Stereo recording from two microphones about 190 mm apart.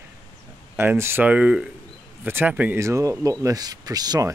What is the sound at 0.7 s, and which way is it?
Speech, 10° right (ahead or behind).